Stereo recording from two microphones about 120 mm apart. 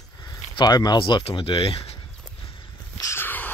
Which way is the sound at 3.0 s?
20° left (ahead or behind).